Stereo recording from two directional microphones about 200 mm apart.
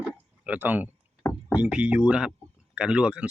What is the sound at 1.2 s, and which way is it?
Rowboat, 10° left (ahead or behind).